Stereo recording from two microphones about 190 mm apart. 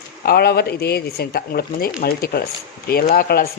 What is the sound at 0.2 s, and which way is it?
Speech, 55° left (ahead or behind).